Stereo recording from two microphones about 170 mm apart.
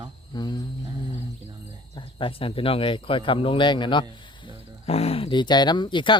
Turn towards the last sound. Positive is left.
turn(degrees=30)  # may be behind; listen again after turning